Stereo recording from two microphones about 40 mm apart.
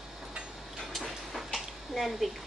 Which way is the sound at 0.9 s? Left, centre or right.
Centre.